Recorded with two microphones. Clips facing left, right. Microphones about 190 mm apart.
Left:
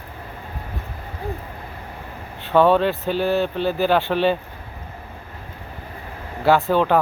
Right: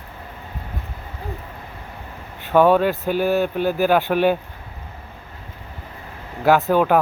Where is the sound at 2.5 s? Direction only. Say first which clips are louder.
Right 1 dB; 10° right (ahead or behind).